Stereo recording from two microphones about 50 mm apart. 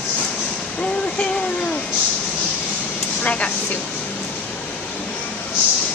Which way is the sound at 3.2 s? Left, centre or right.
Left.